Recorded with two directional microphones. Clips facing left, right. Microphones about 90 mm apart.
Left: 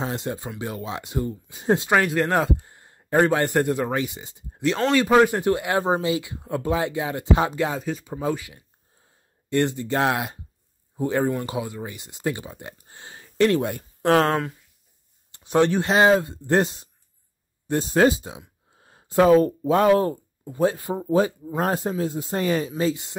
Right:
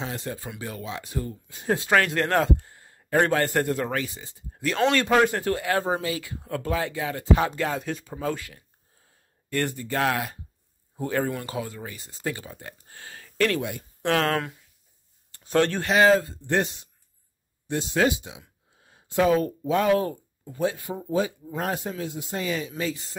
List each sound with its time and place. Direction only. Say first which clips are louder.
0.0 s speech: left 4 dB; 30° left (ahead or behind)
3.3 s speech: left 2 dB; 10° left (ahead or behind)
4.9 s speech: left 7 dB; 5° left (ahead or behind)
7.7 s speech: left 2 dB; 5° left (ahead or behind)
8.1 s speech: left 4 dB; 15° left (ahead or behind)
12.8 s a sound: even; 20° left (ahead or behind)
13.6 s speech: left 5 dB; 40° left (ahead or behind)
15.3 s a sound: left 3 dB; 20° left (ahead or behind)
15.8 s speech: left 1 dB; 30° left (ahead or behind)
16.3 s a man's voice: left 4 dB; 35° left (ahead or behind)